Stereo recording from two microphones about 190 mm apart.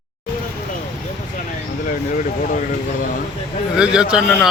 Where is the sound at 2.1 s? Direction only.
40° left (ahead or behind).